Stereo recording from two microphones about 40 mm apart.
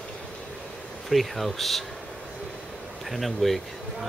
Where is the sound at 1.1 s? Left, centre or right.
Centre.